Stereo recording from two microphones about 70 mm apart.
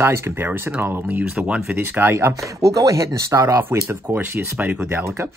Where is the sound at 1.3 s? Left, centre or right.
Centre.